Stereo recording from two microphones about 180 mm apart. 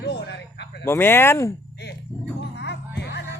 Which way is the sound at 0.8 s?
15° left (ahead or behind).